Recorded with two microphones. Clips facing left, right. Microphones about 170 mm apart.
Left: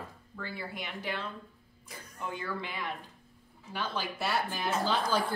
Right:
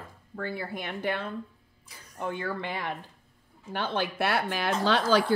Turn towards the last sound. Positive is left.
turn(degrees=-85)